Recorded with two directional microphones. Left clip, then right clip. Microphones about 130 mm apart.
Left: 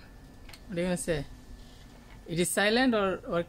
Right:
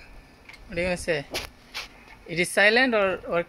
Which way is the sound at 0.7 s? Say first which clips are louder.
Right 5 dB; centre (ahead or behind).